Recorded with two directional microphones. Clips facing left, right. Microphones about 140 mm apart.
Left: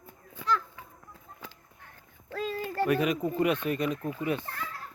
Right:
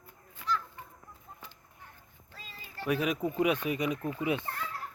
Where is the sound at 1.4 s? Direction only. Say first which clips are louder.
Left 7 dB; 90° left.